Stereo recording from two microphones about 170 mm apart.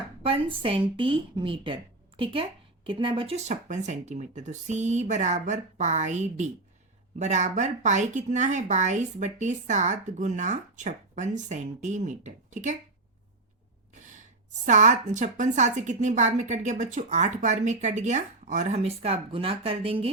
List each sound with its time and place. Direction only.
0.3 s a woman's voice: 30° right (ahead or behind)
14.0 s a woman's voice: 45° right (ahead or behind)